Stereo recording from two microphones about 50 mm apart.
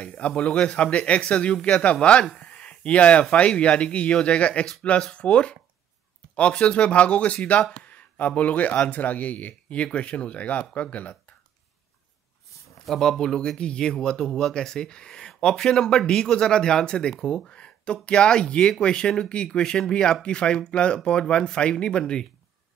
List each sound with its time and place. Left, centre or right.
0.0 s a man's voice: left
12.8 s speech: centre